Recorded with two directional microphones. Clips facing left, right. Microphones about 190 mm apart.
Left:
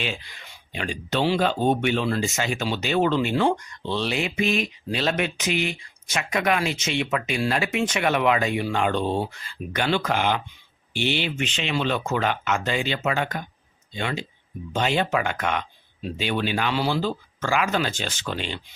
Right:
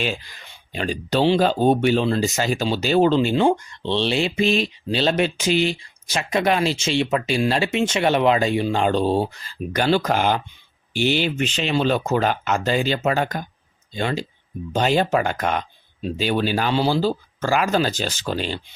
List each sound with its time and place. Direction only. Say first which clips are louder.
0.0 s speech: right 5 dB; 40° right (ahead or behind)